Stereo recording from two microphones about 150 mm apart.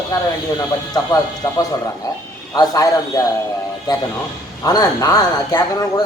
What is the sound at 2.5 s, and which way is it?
Speech, 25° left (ahead or behind).